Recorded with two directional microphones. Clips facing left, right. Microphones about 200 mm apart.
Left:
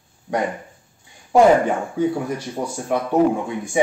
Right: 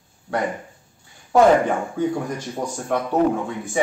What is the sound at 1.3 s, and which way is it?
Speech, 10° left (ahead or behind).